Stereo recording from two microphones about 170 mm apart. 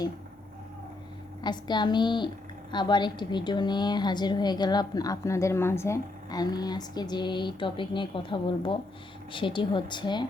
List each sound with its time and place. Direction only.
1.4 s a woman's voice: 25° left (ahead or behind)